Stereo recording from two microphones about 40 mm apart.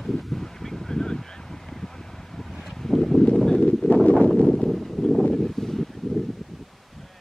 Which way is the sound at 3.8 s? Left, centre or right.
Left.